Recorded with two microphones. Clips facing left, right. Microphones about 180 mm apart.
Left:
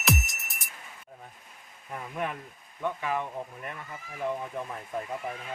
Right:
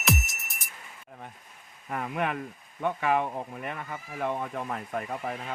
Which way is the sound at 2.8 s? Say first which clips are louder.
Right 4 dB; 70° right (ahead or behind).